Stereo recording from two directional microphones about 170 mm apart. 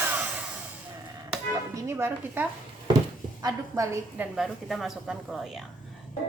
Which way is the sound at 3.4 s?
20° right (ahead or behind).